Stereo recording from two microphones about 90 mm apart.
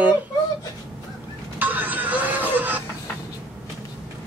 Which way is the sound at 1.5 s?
20° right (ahead or behind).